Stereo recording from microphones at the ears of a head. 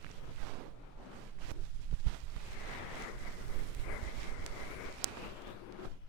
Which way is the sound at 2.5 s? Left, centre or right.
Left.